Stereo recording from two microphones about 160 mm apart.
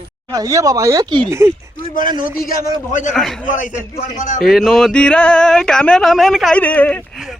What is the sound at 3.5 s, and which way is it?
Speech, 50° left (ahead or behind).